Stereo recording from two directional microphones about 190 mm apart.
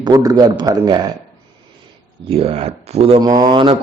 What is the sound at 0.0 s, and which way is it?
A man's voice, 20° right (ahead or behind).